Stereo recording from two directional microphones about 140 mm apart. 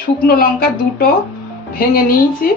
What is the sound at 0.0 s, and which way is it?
Speech, 90° left.